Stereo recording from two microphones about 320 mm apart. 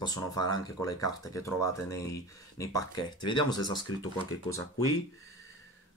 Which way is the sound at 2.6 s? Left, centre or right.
Centre.